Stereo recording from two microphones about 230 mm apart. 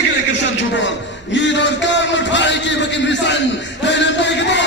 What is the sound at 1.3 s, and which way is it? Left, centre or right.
A man's voice, left.